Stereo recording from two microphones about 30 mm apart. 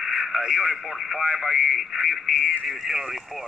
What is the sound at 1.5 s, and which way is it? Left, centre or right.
Speech, right.